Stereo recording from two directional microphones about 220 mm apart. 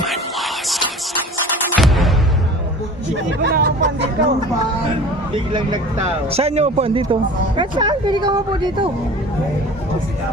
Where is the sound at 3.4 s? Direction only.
45° right (ahead or behind).